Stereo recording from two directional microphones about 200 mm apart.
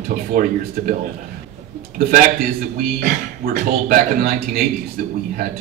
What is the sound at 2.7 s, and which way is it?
A man's voice, 50° right (ahead or behind).